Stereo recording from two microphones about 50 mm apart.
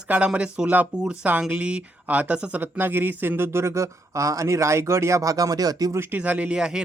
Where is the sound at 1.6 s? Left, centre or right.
Right.